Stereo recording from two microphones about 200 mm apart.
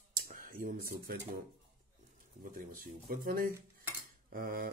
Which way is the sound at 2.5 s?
45° right (ahead or behind).